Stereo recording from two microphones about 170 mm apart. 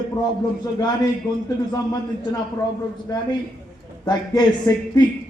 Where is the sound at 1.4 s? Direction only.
25° left (ahead or behind).